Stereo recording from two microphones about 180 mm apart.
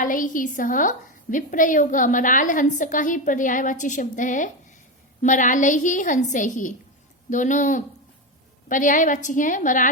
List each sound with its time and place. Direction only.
0.0 s a woman's voice: 45° left (ahead or behind)